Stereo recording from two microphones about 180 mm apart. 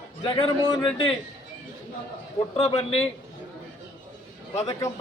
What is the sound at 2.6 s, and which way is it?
Speech, 35° left (ahead or behind).